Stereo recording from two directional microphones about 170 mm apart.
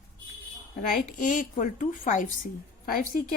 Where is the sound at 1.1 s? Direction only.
50° left (ahead or behind).